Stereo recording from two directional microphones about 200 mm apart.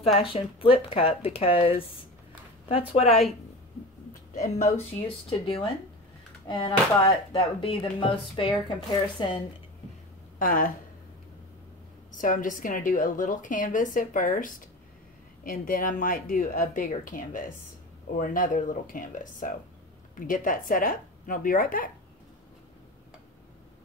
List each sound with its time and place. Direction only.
0.0 s a woman's voice: 25° left (ahead or behind)
4.3 s a woman's voice: 35° left (ahead or behind)
10.4 s speech: 45° left (ahead or behind)
12.1 s a woman's voice: 40° left (ahead or behind)